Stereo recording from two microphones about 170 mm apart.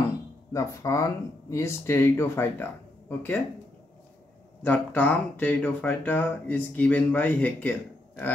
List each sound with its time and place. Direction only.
0.5 s speech: 20° left (ahead or behind)
4.6 s speech: 10° left (ahead or behind)